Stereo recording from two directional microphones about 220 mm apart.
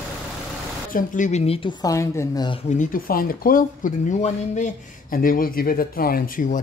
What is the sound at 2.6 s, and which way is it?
Speech, 40° left (ahead or behind).